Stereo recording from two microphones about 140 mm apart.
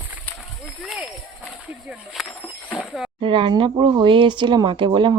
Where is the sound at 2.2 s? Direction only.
10° left (ahead or behind).